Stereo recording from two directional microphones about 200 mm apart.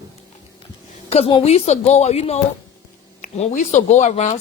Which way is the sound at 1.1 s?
30° left (ahead or behind).